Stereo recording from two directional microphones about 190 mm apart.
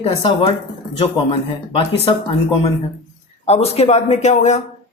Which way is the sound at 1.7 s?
30° left (ahead or behind).